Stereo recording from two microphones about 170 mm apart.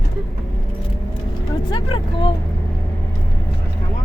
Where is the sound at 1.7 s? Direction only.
30° left (ahead or behind).